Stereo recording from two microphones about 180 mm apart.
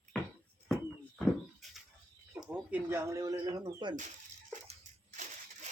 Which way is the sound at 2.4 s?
5° right (ahead or behind).